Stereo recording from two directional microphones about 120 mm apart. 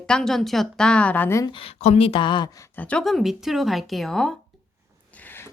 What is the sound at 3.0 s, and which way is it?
A woman's voice, centre (ahead or behind).